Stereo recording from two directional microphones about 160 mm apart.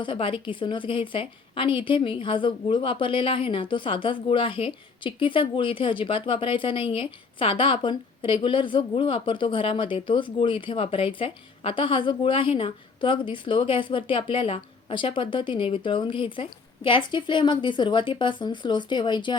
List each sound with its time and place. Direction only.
0.0 s a woman's voice: 30° left (ahead or behind)